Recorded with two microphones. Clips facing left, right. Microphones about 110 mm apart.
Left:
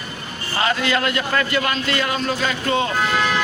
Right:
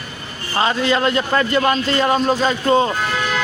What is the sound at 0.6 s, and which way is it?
A man's voice, 30° right (ahead or behind).